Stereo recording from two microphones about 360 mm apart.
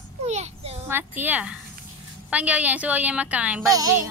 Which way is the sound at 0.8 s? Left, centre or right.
Centre.